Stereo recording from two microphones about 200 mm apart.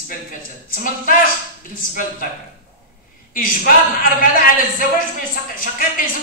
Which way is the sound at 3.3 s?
45° left (ahead or behind).